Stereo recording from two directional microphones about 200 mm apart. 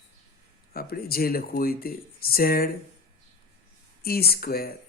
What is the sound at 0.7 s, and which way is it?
Speech, 50° left (ahead or behind).